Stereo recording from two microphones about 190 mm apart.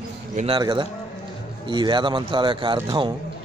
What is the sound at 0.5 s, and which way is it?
A man's voice, 25° right (ahead or behind).